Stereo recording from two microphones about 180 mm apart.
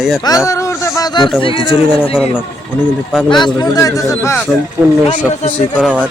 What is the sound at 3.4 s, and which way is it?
Speech, 20° left (ahead or behind).